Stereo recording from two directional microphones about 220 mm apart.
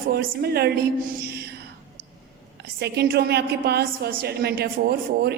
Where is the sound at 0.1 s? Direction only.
45° right (ahead or behind).